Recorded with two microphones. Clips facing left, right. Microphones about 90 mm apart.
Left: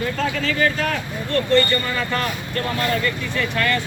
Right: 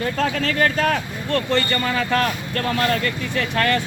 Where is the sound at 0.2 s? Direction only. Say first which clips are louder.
Right 1 dB; 65° right (ahead or behind).